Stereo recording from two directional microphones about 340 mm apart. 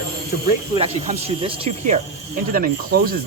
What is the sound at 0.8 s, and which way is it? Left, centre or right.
Speech, centre.